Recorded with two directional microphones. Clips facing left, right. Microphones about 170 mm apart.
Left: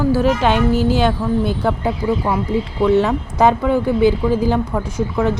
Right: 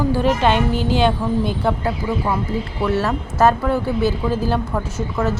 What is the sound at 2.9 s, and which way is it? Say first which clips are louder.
Speech: left 4 dB; 15° left (ahead or behind).